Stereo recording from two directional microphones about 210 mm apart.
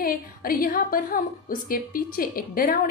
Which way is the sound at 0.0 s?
45° left (ahead or behind).